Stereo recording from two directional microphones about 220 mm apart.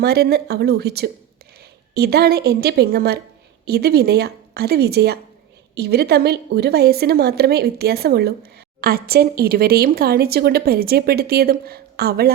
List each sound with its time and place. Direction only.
0.0 s a woman's voice: 45° right (ahead or behind)